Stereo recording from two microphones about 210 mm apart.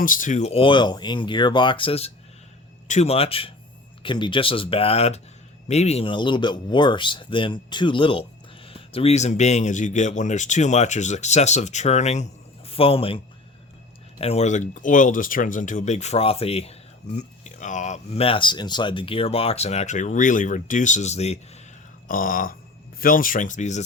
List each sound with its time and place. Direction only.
0.0 s speech: 40° left (ahead or behind)
22.0 s speech: 40° left (ahead or behind)